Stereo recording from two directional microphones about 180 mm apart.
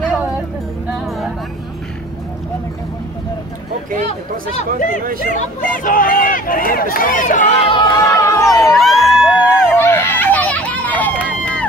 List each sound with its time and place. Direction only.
0.8 s music: centre (ahead or behind)
4.1 s speech: 40° left (ahead or behind)
5.0 s speech: 55° right (ahead or behind)
5.3 s speech: 45° left (ahead or behind)
7.7 s crowd: 20° left (ahead or behind)
8.7 s music: centre (ahead or behind)
9.8 s a sound: 10° left (ahead or behind)